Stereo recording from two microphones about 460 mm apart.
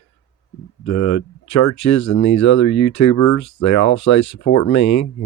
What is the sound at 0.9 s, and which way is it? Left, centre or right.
Speech, left.